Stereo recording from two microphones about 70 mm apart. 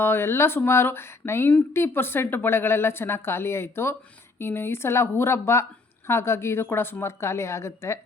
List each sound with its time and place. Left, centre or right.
0.0 s speech: left